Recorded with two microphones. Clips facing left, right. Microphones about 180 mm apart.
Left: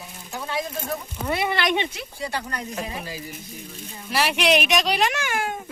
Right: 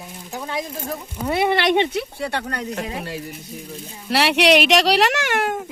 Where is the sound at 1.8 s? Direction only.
65° right (ahead or behind).